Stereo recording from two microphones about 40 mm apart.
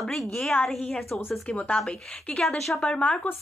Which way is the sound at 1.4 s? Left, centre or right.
Left.